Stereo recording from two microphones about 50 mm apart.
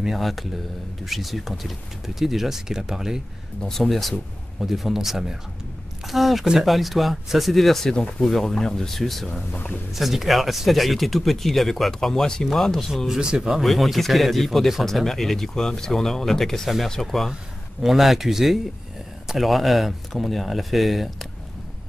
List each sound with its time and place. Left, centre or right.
0.0 s speech: centre
3.6 s speech: centre
3.9 s speech: centre
9.5 s speech: left
9.9 s speech: centre
12.9 s speech: centre